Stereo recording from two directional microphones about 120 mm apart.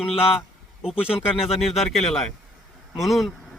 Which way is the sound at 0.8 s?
5° right (ahead or behind).